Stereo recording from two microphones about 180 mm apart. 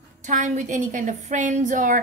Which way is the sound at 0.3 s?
45° right (ahead or behind).